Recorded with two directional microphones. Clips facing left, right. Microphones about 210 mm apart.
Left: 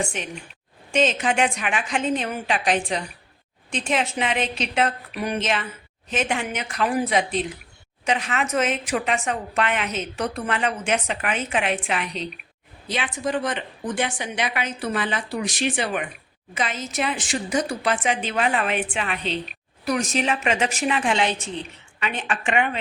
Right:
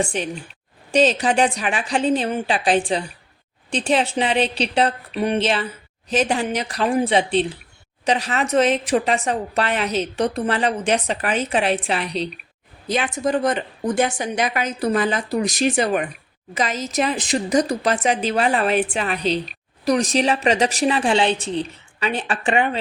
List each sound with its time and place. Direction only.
0.0 s a woman's voice: 35° right (ahead or behind)